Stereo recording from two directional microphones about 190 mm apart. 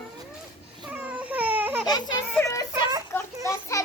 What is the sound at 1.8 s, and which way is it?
Speech, 20° left (ahead or behind).